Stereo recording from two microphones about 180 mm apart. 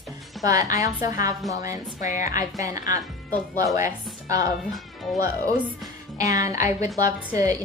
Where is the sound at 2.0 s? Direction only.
45° left (ahead or behind).